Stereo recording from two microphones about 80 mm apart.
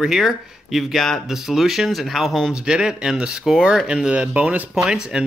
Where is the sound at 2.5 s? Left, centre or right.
Centre.